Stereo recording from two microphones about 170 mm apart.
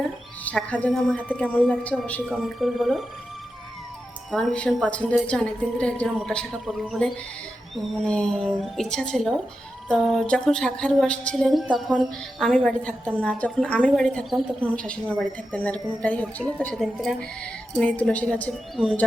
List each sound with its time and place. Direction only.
0.4 s a woman's voice: 10° left (ahead or behind)
4.3 s a woman's voice: centre (ahead or behind)